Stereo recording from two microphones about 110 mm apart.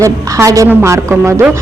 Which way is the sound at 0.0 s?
30° right (ahead or behind).